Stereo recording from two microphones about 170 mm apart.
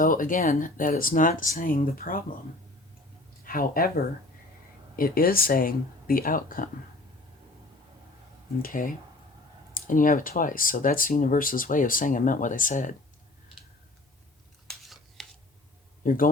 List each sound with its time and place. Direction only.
0.0 s speech: 55° left (ahead or behind)
3.4 s speech: 55° left (ahead or behind)
8.6 s speech: 55° left (ahead or behind)
14.7 s a sound: centre (ahead or behind)
16.0 s speech: 55° left (ahead or behind)